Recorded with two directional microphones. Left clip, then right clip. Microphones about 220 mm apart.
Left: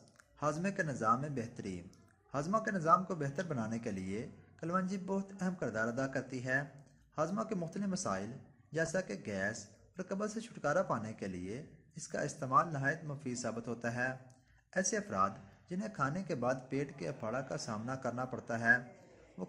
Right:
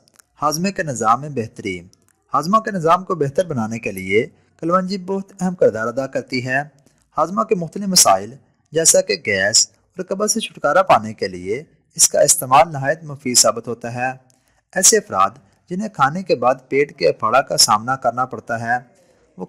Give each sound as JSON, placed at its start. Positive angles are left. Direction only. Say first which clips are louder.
{"t": 0.3, "sound": "speech", "louder": "right 16 dB", "side_deg": -45}